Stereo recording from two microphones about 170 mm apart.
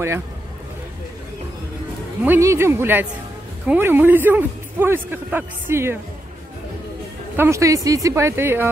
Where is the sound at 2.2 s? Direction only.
15° right (ahead or behind).